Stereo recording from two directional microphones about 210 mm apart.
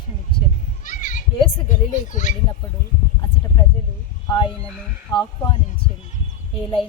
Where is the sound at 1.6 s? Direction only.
35° left (ahead or behind).